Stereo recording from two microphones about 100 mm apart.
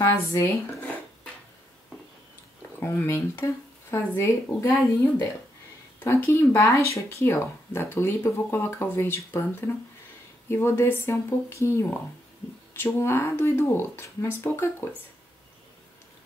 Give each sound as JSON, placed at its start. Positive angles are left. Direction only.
{"t": 0.0, "sound": "speech", "side_deg": 30}
{"t": 2.8, "sound": "speech", "side_deg": 25}
{"t": 5.9, "sound": "speech", "side_deg": 25}